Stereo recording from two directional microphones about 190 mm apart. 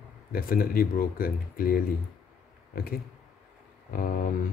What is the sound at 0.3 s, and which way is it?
Speech, 50° left (ahead or behind).